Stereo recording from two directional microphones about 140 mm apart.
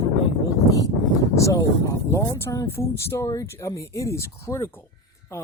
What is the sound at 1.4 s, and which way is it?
Speech, 25° left (ahead or behind).